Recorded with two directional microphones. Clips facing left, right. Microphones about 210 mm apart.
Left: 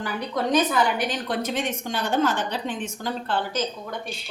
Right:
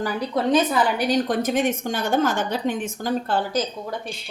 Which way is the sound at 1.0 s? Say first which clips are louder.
Right 6 dB; 45° right (ahead or behind).